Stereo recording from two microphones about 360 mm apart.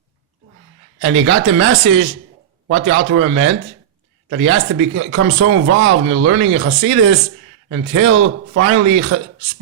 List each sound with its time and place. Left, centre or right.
1.0 s speech: right